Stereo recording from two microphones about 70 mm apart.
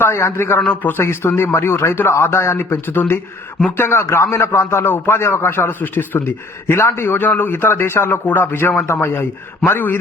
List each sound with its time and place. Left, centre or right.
0.0 s speech: left
0.7 s speech: left
0.9 s speech: left